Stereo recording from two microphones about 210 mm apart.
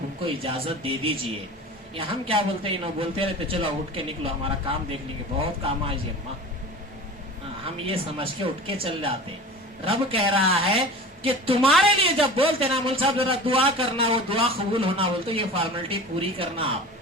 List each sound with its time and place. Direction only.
0.3 s a man's voice: 25° right (ahead or behind)
7.9 s a man's voice: 25° right (ahead or behind)